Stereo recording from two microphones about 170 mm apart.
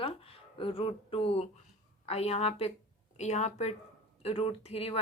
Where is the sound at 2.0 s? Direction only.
35° left (ahead or behind).